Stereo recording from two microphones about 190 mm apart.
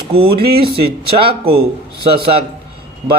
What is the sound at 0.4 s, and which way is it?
Speech, 55° right (ahead or behind).